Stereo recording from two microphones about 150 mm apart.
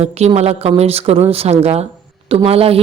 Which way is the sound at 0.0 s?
45° right (ahead or behind).